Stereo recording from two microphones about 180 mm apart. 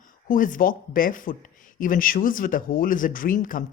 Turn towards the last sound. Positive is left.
turn(degrees=50)  # may be behind; listen again after turning